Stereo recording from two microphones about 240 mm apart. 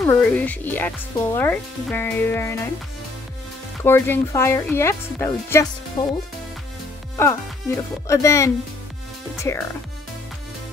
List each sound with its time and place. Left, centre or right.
0.0 s speech: centre
3.8 s speech: centre
7.2 s speech: centre